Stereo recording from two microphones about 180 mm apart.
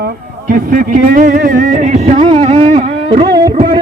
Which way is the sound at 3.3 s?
20° right (ahead or behind).